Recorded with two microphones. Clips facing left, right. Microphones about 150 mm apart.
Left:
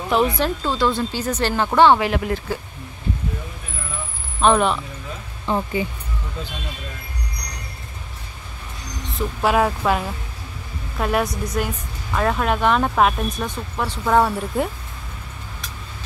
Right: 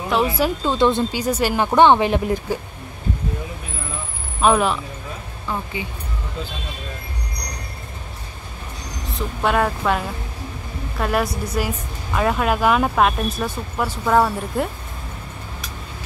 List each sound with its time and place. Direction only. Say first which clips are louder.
0.1 s speech: even; 5° right (ahead or behind)
0.7 s speech: right 5 dB; 20° right (ahead or behind)
4.4 s speech: even; 5° right (ahead or behind)
5.5 s speech: left 5 dB; 25° left (ahead or behind)
9.0 s speech: left 1 dB; centre (ahead or behind)